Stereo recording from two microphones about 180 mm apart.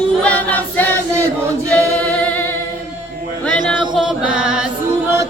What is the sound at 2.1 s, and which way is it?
Music, 10° left (ahead or behind).